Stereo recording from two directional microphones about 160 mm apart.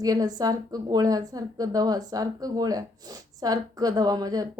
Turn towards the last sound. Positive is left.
turn(degrees=-25)  # may be behind; listen again after turning